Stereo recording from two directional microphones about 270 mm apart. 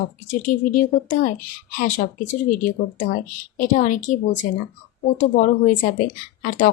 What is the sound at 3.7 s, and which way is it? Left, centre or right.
Speech, left.